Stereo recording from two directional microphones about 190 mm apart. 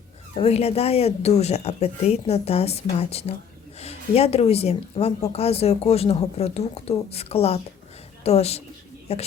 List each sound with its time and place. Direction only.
0.3 s speech: 35° left (ahead or behind)